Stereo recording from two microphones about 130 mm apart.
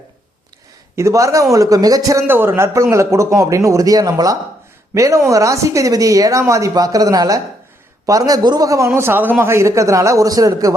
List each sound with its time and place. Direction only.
0.9 s a man's voice: 25° right (ahead or behind)